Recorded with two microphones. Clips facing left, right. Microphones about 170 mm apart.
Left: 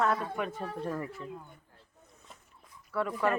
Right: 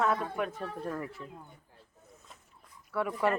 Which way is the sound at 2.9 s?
10° right (ahead or behind).